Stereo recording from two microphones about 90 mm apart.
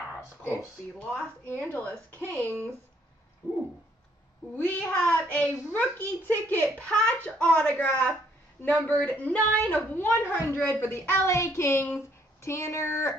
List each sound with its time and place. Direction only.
0.4 s speech: 25° right (ahead or behind)
0.9 s a woman's voice: 15° left (ahead or behind)
4.6 s a child's voice: 20° left (ahead or behind)